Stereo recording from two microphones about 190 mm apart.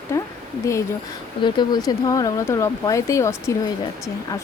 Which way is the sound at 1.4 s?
20° left (ahead or behind).